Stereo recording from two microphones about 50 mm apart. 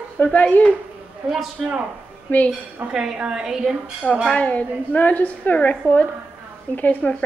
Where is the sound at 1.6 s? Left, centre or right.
Centre.